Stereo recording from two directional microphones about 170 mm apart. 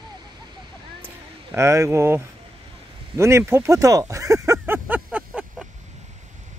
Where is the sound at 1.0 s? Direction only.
15° right (ahead or behind).